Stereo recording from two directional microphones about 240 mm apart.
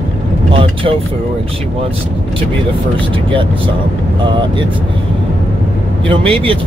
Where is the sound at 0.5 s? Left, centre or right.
Right.